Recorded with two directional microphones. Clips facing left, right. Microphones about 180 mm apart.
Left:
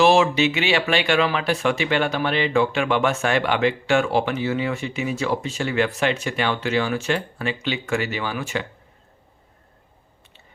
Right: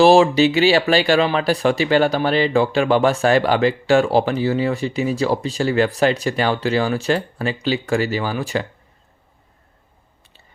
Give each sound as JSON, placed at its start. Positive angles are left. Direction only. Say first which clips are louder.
{"t": 0.0, "sound": "speech", "louder": "right 5 dB", "side_deg": -35}